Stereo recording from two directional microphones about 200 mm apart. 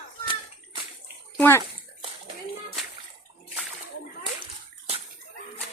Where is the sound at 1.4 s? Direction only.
10° left (ahead or behind).